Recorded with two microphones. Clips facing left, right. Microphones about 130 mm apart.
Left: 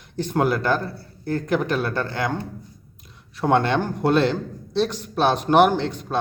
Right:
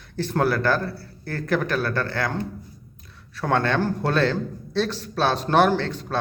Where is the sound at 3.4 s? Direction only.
20° left (ahead or behind).